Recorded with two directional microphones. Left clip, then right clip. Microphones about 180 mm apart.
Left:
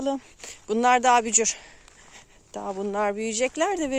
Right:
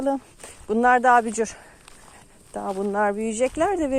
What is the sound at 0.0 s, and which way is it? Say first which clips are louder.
Speech: right 3 dB; 20° left (ahead or behind).